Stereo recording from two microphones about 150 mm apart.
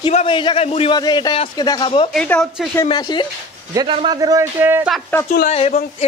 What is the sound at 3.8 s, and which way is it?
Speech, 30° right (ahead or behind).